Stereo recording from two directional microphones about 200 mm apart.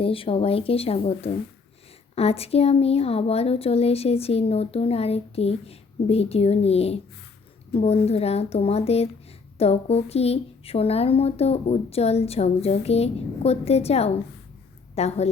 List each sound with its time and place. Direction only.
0.0 s a woman's voice: 30° left (ahead or behind)